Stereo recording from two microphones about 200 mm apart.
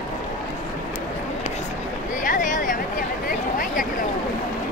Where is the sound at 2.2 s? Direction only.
40° left (ahead or behind).